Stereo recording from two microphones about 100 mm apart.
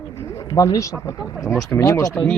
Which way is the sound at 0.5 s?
35° left (ahead or behind).